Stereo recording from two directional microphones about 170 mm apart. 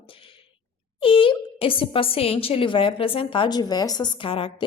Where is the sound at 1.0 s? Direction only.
30° left (ahead or behind).